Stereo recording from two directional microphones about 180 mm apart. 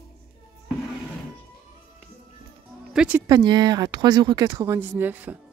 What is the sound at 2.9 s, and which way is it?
Music, 5° right (ahead or behind).